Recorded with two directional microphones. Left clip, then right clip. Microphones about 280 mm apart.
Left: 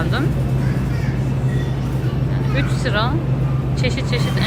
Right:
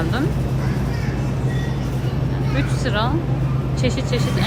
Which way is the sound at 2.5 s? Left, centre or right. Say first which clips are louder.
Left 2 dB; centre.